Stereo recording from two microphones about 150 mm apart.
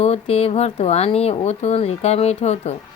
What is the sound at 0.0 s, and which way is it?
A woman's voice, 45° left (ahead or behind).